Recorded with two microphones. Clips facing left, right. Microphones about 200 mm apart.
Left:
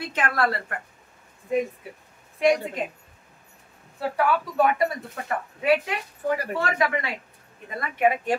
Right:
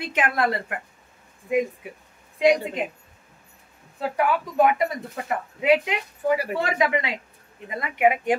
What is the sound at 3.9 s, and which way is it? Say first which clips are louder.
Speech: even; 20° right (ahead or behind).